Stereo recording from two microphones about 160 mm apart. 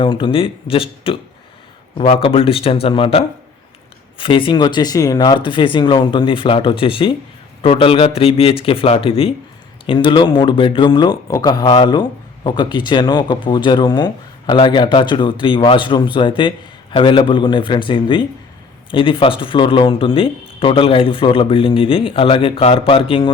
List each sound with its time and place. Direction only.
0.0 s speech: 30° left (ahead or behind)